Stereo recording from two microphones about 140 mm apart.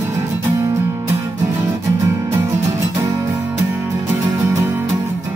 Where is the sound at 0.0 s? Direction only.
15° right (ahead or behind).